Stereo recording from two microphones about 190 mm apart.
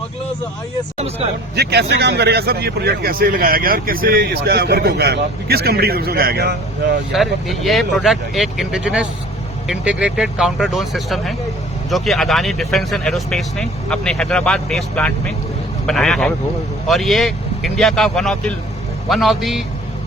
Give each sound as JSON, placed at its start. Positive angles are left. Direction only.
{"t": 0.9, "sound": "speech", "side_deg": -30}
{"t": 1.5, "sound": "speech", "side_deg": -60}
{"t": 7.1, "sound": "speech", "side_deg": 0}